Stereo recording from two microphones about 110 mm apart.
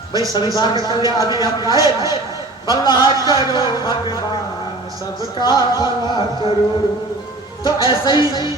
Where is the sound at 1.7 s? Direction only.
30° right (ahead or behind).